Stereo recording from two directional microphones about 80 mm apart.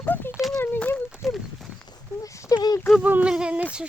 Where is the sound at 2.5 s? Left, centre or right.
Left.